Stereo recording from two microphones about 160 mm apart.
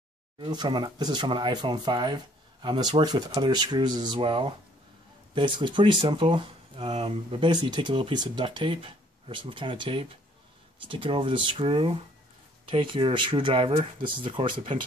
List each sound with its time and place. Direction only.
0.4 s speech: 30° right (ahead or behind)